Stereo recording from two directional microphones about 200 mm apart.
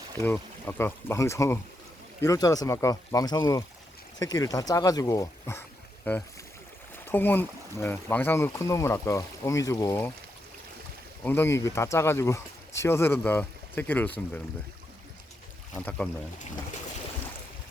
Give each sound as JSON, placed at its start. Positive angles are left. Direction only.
{"t": 0.2, "sound": "speech", "side_deg": 10}
{"t": 11.2, "sound": "speech", "side_deg": 10}
{"t": 15.8, "sound": "speech", "side_deg": 10}